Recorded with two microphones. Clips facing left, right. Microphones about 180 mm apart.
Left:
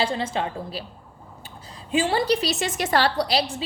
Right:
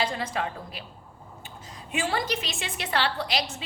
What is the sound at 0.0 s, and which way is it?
Speech, 25° left (ahead or behind).